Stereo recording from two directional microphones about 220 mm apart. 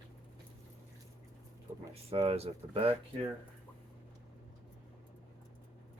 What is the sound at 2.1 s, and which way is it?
Speech, 25° right (ahead or behind).